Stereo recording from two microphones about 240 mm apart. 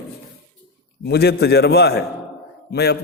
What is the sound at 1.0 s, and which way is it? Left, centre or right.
A man's voice, left.